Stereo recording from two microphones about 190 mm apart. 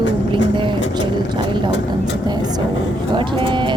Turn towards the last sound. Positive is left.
turn(degrees=-25)  # may be behind; listen again after turning